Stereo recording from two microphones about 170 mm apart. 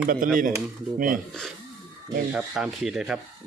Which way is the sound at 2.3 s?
5° right (ahead or behind).